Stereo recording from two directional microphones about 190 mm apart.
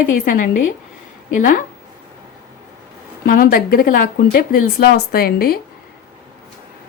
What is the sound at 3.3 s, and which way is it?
Speech, 50° left (ahead or behind).